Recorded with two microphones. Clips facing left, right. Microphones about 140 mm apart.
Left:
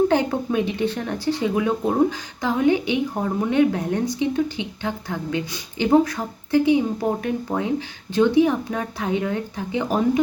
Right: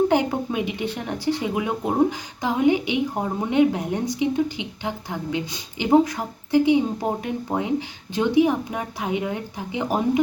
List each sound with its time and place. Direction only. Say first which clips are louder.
0.1 s speech: left 1 dB; 15° right (ahead or behind)